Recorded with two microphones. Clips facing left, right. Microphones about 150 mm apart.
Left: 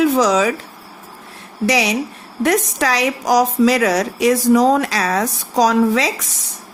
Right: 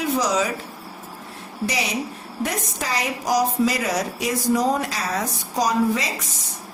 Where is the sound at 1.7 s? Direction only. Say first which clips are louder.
Left 9 dB; 90° left.